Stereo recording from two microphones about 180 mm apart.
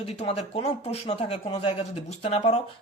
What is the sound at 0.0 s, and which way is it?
Speech, 35° left (ahead or behind).